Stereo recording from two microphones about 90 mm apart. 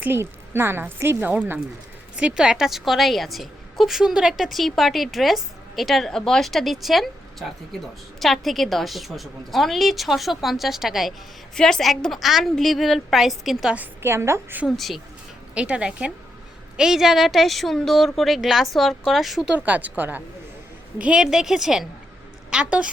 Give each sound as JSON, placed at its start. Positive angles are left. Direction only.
{"t": 0.0, "sound": "a woman's voice", "side_deg": -25}
{"t": 2.1, "sound": "a woman's voice", "side_deg": -10}
{"t": 13.7, "sound": "a woman's voice", "side_deg": -25}
{"t": 14.8, "sound": "a woman's voice", "side_deg": 0}
{"t": 15.5, "sound": "a woman's voice", "side_deg": -10}
{"t": 19.5, "sound": "a woman's voice", "side_deg": -15}